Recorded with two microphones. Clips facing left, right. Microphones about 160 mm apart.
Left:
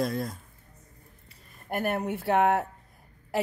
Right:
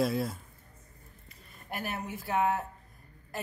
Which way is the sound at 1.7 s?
55° left (ahead or behind).